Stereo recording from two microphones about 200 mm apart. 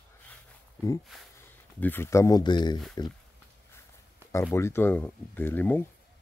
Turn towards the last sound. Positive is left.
turn(degrees=10)  # may be behind; listen again after turning